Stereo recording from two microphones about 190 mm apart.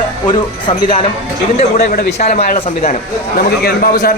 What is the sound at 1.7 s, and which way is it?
A man's voice, 50° left (ahead or behind).